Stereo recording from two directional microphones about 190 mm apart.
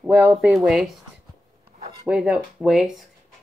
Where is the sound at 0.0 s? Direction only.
5° right (ahead or behind).